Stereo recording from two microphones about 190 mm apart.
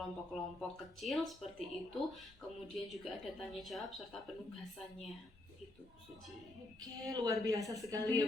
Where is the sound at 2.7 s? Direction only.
Centre (ahead or behind).